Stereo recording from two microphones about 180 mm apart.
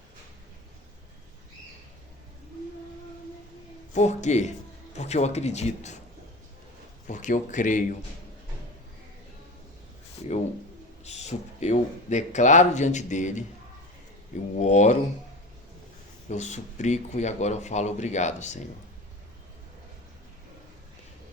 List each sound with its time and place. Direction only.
3.9 s speech: 40° left (ahead or behind)
7.1 s speech: 45° left (ahead or behind)
10.2 s a sound: 30° left (ahead or behind)
11.0 s speech: 40° left (ahead or behind)
14.6 s speech: 40° left (ahead or behind)
16.3 s speech: 40° left (ahead or behind)